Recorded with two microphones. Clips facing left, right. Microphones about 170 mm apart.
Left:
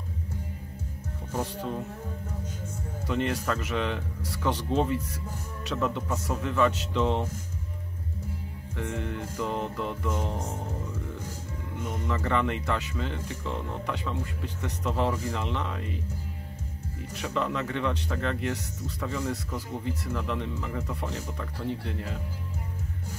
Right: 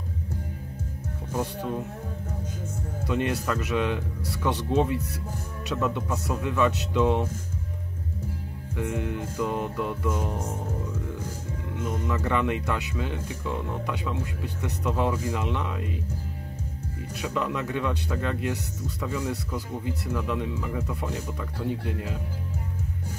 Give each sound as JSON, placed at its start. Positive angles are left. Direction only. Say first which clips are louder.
{"t": 1.3, "sound": "speech", "louder": "right 2 dB", "side_deg": -10}
{"t": 3.1, "sound": "speech", "louder": "right 1 dB", "side_deg": -10}
{"t": 4.9, "sound": "speech", "louder": "right 1 dB", "side_deg": -65}
{"t": 5.8, "sound": "speech", "louder": "right 1 dB", "side_deg": -10}
{"t": 8.7, "sound": "speech", "louder": "right 3 dB", "side_deg": -10}
{"t": 12.2, "sound": "speech", "louder": "right 1 dB", "side_deg": -10}
{"t": 17.2, "sound": "speech", "louder": "right 1 dB", "side_deg": -10}